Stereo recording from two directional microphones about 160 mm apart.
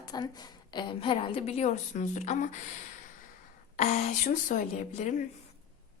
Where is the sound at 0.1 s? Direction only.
25° left (ahead or behind); by 2.6 s 45° left (ahead or behind).